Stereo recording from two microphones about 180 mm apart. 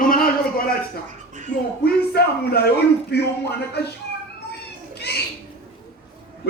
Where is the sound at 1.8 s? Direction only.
60° left (ahead or behind).